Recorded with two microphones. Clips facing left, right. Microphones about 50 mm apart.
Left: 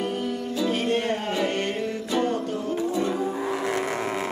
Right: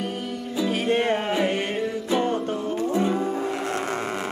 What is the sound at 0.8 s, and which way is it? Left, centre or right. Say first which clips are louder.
Music: right 3 dB; right.